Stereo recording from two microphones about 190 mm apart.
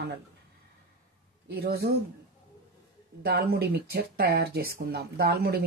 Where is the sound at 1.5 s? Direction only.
55° right (ahead or behind).